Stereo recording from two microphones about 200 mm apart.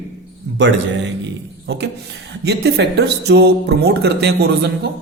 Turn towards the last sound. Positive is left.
turn(degrees=-55)  # may be behind; listen again after turning